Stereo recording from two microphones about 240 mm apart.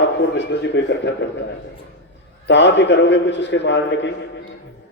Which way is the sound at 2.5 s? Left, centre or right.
Left.